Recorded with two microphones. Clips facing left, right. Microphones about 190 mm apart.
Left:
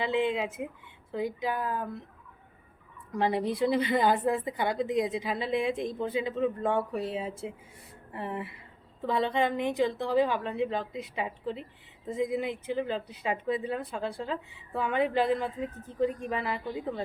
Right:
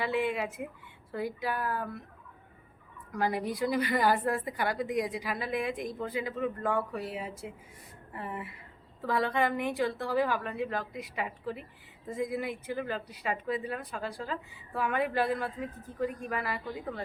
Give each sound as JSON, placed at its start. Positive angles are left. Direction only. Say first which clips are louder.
{"t": 0.0, "sound": "a woman's voice", "louder": "left 2 dB", "side_deg": 20}
{"t": 3.1, "sound": "a woman's voice", "louder": "left 3 dB", "side_deg": 25}